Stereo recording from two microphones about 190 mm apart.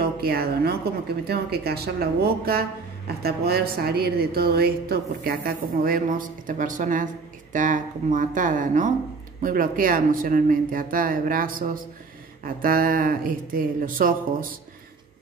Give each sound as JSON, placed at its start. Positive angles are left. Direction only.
{"t": 0.0, "sound": "a woman's voice", "side_deg": -55}